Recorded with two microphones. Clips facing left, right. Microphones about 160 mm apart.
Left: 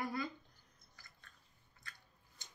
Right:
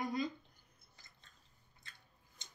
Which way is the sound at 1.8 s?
20° right (ahead or behind).